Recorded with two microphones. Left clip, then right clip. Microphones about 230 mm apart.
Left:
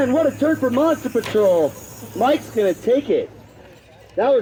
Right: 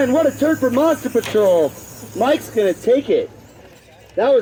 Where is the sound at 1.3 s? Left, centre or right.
Right.